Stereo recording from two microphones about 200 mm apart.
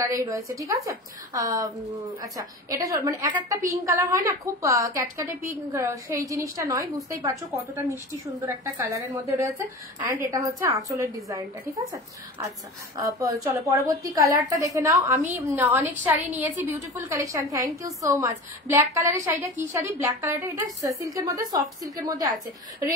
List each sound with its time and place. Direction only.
0.0 s a woman's voice: 15° right (ahead or behind)